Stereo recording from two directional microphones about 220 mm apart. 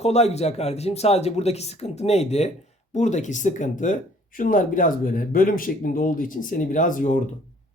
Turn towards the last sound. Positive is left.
turn(degrees=35)  # may be behind; listen again after turning